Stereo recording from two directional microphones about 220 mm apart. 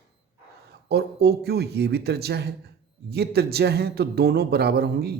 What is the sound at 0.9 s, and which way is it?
Speech, 45° right (ahead or behind).